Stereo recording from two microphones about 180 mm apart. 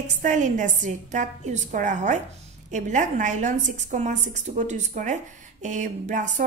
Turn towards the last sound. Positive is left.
turn(degrees=-40)  # may be behind; listen again after turning